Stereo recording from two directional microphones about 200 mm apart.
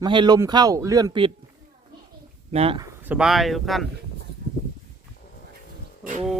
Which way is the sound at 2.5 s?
30° right (ahead or behind).